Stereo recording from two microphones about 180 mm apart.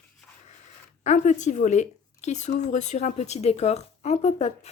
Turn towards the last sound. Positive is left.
turn(degrees=40)  # may be behind; listen again after turning